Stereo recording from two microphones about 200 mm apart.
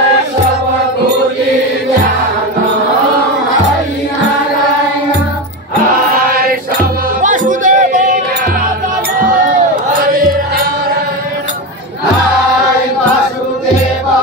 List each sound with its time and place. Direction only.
6.1 s choir: 45° right (ahead or behind)
7.2 s music: 40° right (ahead or behind)
10.0 s music: 45° right (ahead or behind)